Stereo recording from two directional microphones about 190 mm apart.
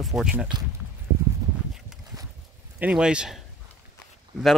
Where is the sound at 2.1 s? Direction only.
20° right (ahead or behind).